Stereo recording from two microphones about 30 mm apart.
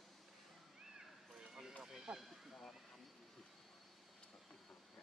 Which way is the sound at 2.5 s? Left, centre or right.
Centre.